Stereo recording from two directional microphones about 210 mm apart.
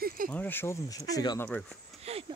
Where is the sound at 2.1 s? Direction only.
30° right (ahead or behind).